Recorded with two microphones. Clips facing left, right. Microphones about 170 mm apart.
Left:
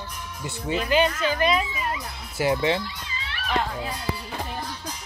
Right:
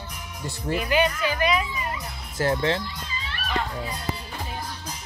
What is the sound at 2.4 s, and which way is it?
Speech, 5° left (ahead or behind).